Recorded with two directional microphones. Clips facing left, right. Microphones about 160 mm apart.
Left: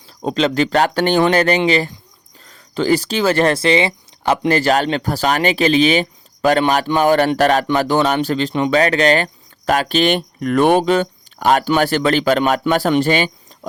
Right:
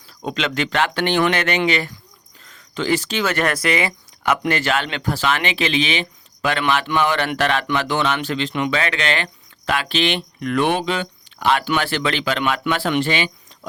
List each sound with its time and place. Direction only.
0.2 s speech: 35° left (ahead or behind)